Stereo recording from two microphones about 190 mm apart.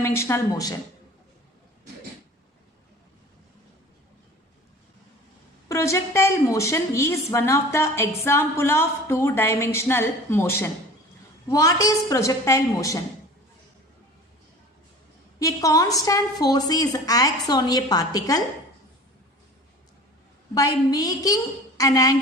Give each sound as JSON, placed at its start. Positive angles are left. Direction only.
{"t": 0.0, "sound": "a woman's voice", "side_deg": 15}
{"t": 5.6, "sound": "a woman's voice", "side_deg": 15}
{"t": 15.4, "sound": "a woman's voice", "side_deg": 15}
{"t": 20.5, "sound": "a woman's voice", "side_deg": 20}